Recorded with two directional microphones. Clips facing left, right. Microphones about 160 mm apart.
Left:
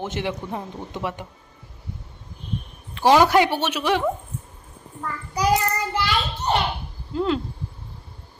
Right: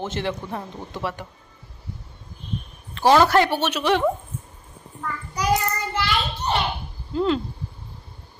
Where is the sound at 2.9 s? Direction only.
15° left (ahead or behind).